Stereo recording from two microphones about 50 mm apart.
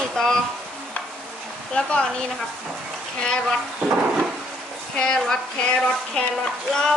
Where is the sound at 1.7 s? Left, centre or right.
Centre.